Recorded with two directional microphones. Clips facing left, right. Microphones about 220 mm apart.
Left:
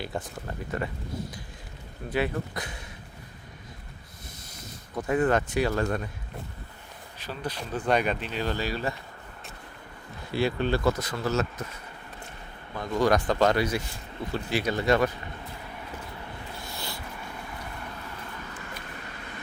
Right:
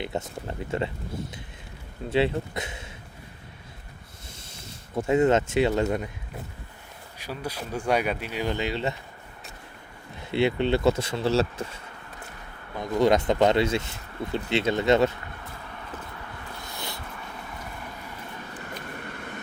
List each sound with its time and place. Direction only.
0.0 s speech: 20° right (ahead or behind)
2.0 s speech: 25° right (ahead or behind)
4.9 s speech: 25° right (ahead or behind)
7.2 s speech: 10° right (ahead or behind)
10.3 s speech: 20° right (ahead or behind)
12.7 s speech: 20° right (ahead or behind)
16.6 s dog: 20° right (ahead or behind)